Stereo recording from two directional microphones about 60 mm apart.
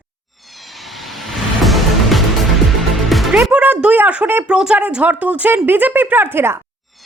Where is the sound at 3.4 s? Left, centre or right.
Right.